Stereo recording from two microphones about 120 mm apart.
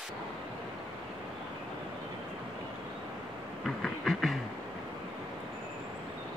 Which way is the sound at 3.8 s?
Centre (ahead or behind).